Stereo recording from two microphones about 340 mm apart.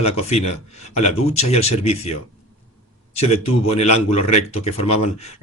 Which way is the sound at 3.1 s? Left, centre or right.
Centre.